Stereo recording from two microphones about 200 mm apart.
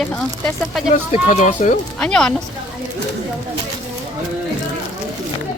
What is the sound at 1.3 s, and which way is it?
Speech, 35° left (ahead or behind).